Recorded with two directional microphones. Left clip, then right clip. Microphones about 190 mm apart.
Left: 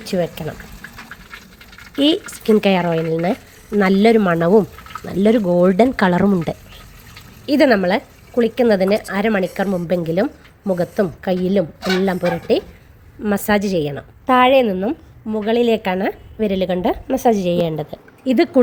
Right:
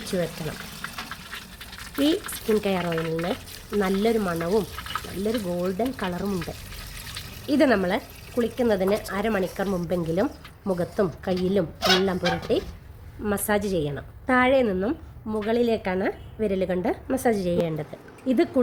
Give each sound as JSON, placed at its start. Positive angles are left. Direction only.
{"t": 0.0, "sound": "a woman's voice", "side_deg": 20}
{"t": 2.0, "sound": "a woman's voice", "side_deg": 30}
{"t": 7.4, "sound": "a woman's voice", "side_deg": 20}